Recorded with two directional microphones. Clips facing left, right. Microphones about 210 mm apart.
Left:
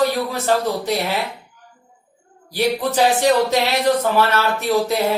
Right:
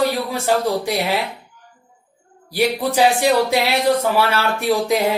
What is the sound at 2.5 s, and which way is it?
A man's voice, 10° right (ahead or behind).